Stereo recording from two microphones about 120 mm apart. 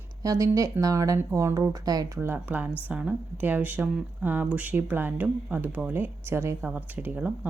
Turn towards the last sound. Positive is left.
turn(degrees=-10)  # may be behind; listen again after turning